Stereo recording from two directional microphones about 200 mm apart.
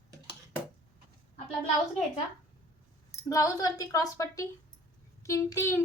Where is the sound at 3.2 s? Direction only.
15° left (ahead or behind).